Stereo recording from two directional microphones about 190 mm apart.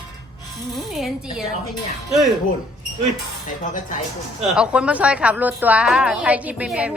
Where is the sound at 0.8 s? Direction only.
Centre (ahead or behind).